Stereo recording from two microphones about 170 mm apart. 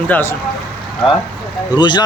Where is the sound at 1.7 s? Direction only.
25° left (ahead or behind).